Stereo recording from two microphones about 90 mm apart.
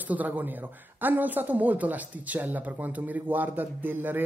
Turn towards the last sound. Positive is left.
turn(degrees=-20)  # may be behind; listen again after turning